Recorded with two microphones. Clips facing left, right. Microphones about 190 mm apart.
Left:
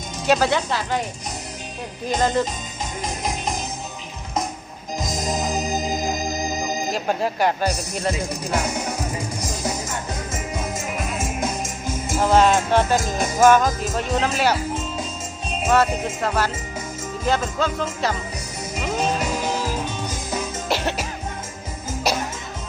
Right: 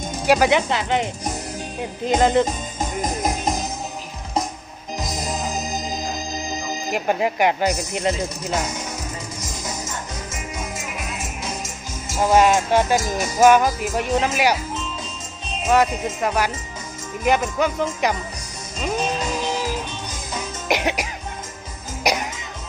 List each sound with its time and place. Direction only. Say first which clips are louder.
0.3 s speech: right 2 dB; 10° right (ahead or behind)
2.0 s speech: right 4 dB; 20° right (ahead or behind)
6.9 s speech: right 5 dB; 15° right (ahead or behind)
12.2 s speech: right 1 dB; 10° right (ahead or behind)
15.7 s speech: right 1 dB; 15° right (ahead or behind)
20.7 s music: right 4 dB; 15° right (ahead or behind)